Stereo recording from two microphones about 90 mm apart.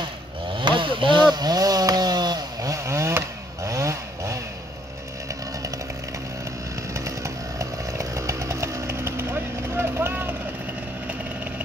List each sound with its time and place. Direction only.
0.6 s a sound: 70° right (ahead or behind); by 2.7 s 50° right (ahead or behind)
2.7 s chainsaw: 35° right (ahead or behind)
7.1 s chainsaw: 35° right (ahead or behind)